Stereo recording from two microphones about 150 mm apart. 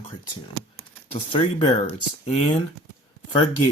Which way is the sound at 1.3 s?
30° left (ahead or behind).